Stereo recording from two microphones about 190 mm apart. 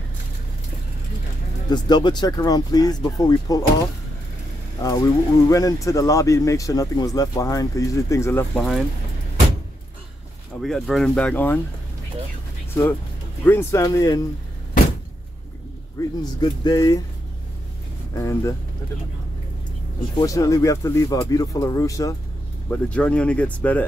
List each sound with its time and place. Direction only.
1.7 s speech: 20° left (ahead or behind)
4.8 s speech: 20° left (ahead or behind)
8.5 s speech: centre (ahead or behind)
10.6 s speech: centre (ahead or behind)
13.4 s speech: 10° left (ahead or behind)
16.0 s speech: 15° left (ahead or behind)
18.1 s speech: 15° left (ahead or behind)
20.2 s speech: 15° left (ahead or behind)